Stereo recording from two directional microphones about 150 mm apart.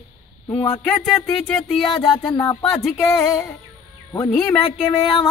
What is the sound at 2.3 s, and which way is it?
A man's voice, 20° left (ahead or behind).